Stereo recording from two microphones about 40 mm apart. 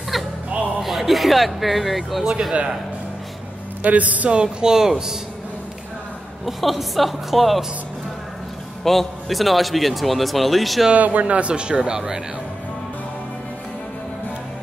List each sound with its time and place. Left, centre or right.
0.1 s music: centre
0.8 s a man's voice: centre
3.8 s a man's voice: right
4.3 s speech: right
6.4 s a man's voice: centre
8.8 s a man's voice: centre
10.9 s speech: right; by 12.2 s centre